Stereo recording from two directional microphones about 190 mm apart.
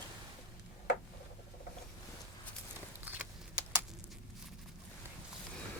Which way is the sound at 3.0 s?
10° right (ahead or behind).